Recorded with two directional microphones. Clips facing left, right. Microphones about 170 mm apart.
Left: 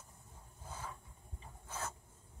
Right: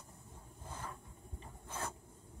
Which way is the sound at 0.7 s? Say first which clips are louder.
Even; 10° left (ahead or behind).